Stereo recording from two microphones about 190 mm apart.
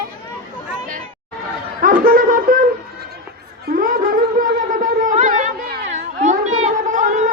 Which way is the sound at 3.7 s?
50° right (ahead or behind).